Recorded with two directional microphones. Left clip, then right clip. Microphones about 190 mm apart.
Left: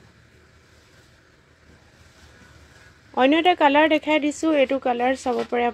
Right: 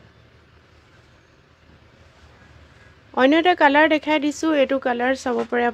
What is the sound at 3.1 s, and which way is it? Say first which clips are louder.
Speech: right 1 dB; 10° right (ahead or behind).